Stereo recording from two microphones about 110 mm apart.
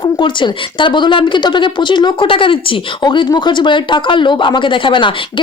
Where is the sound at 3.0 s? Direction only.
40° left (ahead or behind).